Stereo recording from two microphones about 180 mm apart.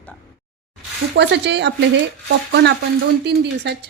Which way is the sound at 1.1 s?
70° right (ahead or behind).